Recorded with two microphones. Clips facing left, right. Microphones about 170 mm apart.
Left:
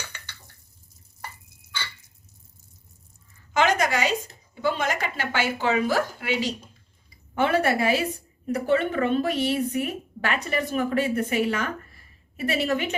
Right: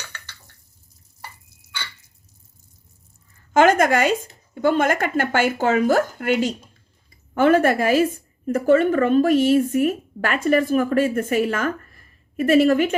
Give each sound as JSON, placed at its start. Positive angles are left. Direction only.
{"t": 3.5, "sound": "speech", "side_deg": -50}